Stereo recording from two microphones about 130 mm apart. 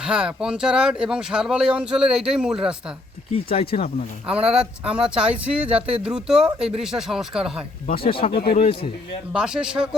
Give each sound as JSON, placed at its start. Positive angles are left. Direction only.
{"t": 0.0, "sound": "speech", "side_deg": -5}
{"t": 3.6, "sound": "speech", "side_deg": 50}
{"t": 4.3, "sound": "speech", "side_deg": -5}
{"t": 8.0, "sound": "speech", "side_deg": 45}
{"t": 9.3, "sound": "speech", "side_deg": -5}